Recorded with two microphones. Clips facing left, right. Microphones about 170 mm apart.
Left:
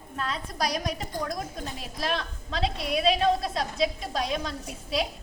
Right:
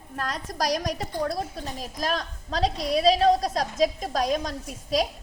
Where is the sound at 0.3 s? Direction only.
40° right (ahead or behind).